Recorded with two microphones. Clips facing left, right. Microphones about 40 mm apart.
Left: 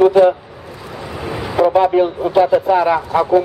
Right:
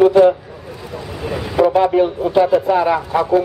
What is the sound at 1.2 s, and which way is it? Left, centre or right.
Vehicle, centre.